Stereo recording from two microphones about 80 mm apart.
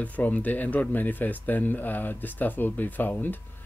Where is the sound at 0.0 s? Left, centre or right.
Centre.